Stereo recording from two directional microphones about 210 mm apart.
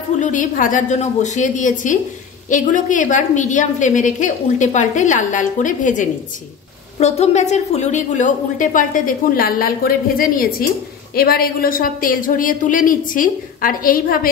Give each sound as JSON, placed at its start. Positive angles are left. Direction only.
{"t": 0.2, "sound": "a woman's voice", "side_deg": 35}